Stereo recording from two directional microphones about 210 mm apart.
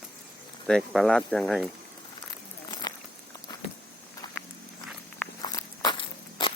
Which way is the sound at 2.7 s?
20° left (ahead or behind).